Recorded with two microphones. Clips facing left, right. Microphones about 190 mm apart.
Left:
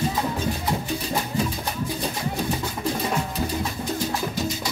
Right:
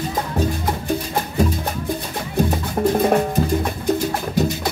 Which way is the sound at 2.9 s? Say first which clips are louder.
Right 10 dB; 55° right (ahead or behind).